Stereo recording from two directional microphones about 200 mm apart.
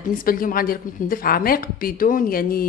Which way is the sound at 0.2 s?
45° left (ahead or behind).